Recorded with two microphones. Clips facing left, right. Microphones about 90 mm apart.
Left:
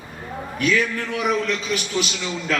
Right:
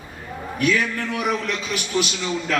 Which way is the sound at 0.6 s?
40° right (ahead or behind).